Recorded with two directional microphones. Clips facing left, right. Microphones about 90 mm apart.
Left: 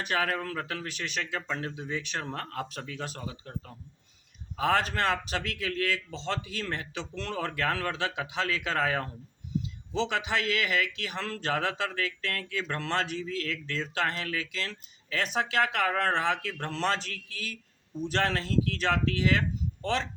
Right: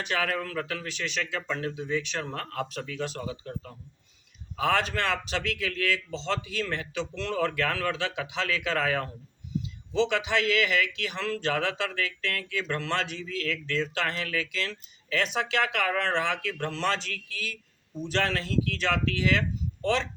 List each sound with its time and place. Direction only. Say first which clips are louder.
0.0 s speech: even; 35° left (ahead or behind)
0.9 s speech: right 2 dB; 40° left (ahead or behind)
4.5 s a man's voice: even; 35° left (ahead or behind)